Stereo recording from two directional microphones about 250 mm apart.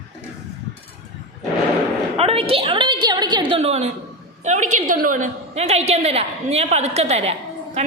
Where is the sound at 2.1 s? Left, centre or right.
Right.